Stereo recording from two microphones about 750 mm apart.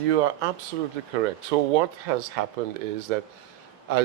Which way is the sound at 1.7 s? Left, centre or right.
Right.